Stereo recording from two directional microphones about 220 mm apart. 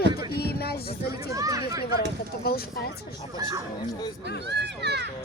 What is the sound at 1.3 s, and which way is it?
Speech, 15° right (ahead or behind).